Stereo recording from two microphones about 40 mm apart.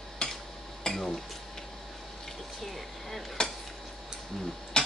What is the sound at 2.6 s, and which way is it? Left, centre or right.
Speech, centre.